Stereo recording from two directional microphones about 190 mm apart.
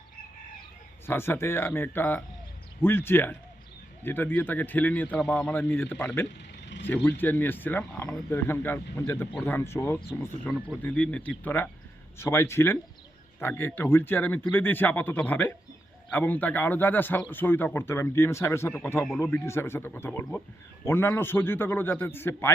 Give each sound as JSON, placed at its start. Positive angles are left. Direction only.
{"t": 1.0, "sound": "speech", "side_deg": 10}
{"t": 6.2, "sound": "vehicle", "side_deg": 70}
{"t": 6.8, "sound": "speech", "side_deg": 10}